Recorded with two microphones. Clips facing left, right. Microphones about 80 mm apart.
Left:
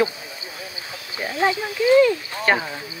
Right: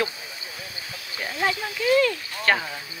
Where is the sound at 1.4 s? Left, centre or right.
Centre.